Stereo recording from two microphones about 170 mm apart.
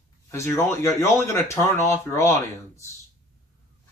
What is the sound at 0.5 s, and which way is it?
Speech, 15° left (ahead or behind).